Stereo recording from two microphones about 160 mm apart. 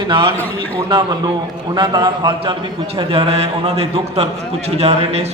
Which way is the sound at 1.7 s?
25° right (ahead or behind).